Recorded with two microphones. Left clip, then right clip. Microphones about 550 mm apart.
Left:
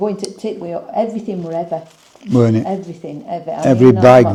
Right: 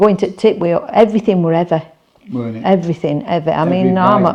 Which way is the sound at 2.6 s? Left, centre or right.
Right.